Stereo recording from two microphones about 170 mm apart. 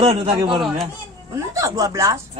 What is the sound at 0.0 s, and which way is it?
Speech, 40° right (ahead or behind).